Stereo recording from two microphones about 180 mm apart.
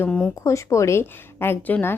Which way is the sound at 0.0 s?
5° left (ahead or behind).